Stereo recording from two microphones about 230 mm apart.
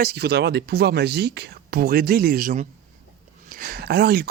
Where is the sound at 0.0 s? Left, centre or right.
Right.